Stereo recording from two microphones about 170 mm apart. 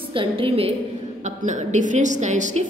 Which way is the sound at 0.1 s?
30° right (ahead or behind).